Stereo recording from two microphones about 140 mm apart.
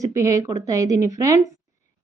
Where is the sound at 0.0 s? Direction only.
25° right (ahead or behind).